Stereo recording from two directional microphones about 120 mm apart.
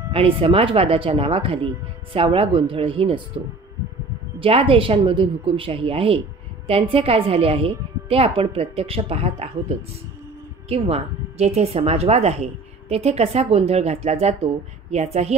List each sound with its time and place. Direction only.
0.1 s a woman's voice: 50° right (ahead or behind)
4.4 s a woman's voice: 50° right (ahead or behind)